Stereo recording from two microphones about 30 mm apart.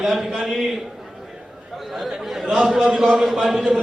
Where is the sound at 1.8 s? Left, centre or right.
Centre.